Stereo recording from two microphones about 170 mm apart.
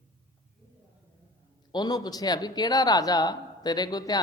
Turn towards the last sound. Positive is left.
turn(degrees=20)  # may be behind; listen again after turning